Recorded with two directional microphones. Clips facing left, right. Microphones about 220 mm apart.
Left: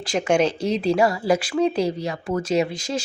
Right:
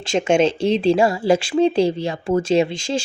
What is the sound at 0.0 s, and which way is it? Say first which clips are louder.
Speech: right 3 dB; 25° right (ahead or behind).